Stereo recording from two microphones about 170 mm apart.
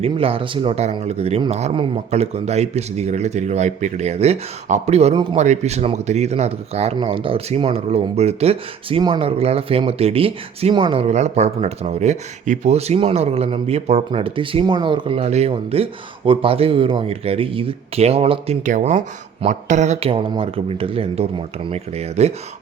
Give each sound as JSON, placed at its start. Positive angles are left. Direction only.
{"t": 0.0, "sound": "speech", "side_deg": -35}